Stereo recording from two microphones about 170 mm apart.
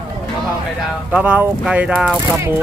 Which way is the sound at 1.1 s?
5° right (ahead or behind).